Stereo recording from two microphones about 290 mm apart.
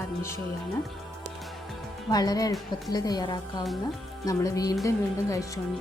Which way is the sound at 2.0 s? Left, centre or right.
Centre.